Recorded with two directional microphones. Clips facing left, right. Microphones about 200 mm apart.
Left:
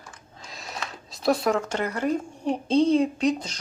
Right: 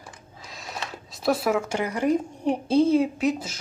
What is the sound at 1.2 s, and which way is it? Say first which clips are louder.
A woman's voice: even; 5° right (ahead or behind).